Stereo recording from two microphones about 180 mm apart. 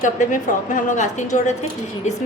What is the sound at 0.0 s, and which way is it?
A woman's voice, 45° left (ahead or behind).